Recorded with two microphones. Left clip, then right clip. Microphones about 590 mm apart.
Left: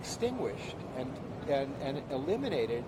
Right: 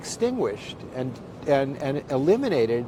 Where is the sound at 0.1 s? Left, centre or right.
Right.